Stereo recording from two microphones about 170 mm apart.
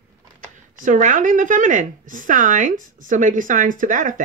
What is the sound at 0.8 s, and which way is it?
A woman's voice, 50° right (ahead or behind).